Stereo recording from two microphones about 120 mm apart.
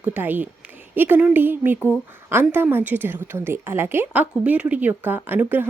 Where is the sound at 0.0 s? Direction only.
15° right (ahead or behind).